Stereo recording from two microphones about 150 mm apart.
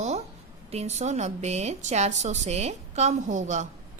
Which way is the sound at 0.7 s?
45° right (ahead or behind).